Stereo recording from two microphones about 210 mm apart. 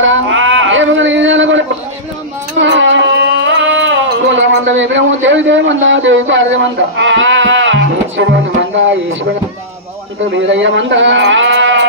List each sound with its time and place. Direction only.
0.0 s a sound: 65° right (ahead or behind)
2.6 s music: 60° right (ahead or behind)
10.3 s speech: 60° right (ahead or behind)